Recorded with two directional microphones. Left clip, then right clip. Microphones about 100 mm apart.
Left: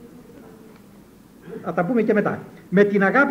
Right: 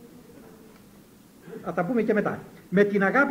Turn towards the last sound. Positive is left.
turn(degrees=-30)  # may be behind; listen again after turning